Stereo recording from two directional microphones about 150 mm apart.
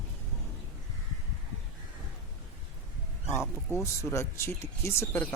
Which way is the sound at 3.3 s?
15° left (ahead or behind).